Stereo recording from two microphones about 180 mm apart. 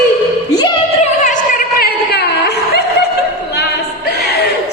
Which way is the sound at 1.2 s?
50° left (ahead or behind).